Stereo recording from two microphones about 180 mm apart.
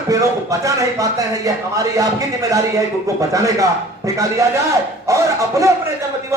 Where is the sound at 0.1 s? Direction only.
20° right (ahead or behind).